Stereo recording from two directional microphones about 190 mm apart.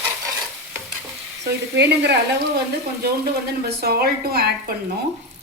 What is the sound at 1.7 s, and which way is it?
Speech, 60° right (ahead or behind).